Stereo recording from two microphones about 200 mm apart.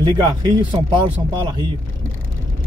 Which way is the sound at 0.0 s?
25° right (ahead or behind).